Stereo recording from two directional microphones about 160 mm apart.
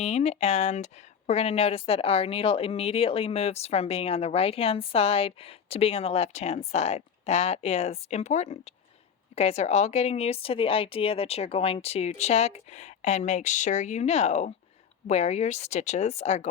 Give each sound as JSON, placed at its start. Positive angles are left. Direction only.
{"t": 0.0, "sound": "speech", "side_deg": 45}